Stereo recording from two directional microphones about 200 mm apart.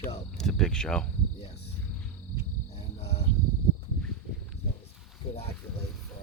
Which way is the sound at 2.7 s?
30° left (ahead or behind).